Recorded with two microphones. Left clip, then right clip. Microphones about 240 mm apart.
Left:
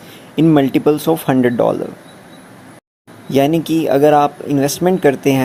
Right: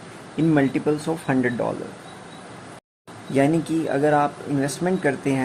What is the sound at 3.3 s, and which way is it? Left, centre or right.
Speech, left.